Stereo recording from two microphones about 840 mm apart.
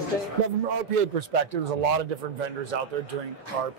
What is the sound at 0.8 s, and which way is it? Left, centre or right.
A man's voice, right.